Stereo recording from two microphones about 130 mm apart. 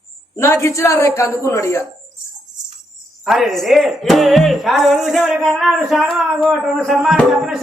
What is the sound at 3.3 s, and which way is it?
Speech, centre (ahead or behind).